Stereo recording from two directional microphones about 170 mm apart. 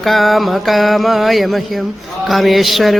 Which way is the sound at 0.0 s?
Centre (ahead or behind).